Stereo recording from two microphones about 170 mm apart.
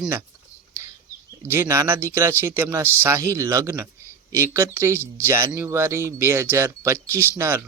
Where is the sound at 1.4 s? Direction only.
15° right (ahead or behind).